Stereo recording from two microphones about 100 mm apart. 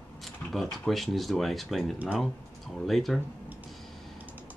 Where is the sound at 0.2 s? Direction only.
Centre (ahead or behind).